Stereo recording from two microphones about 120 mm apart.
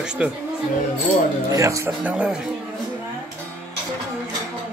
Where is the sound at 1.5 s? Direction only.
25° right (ahead or behind).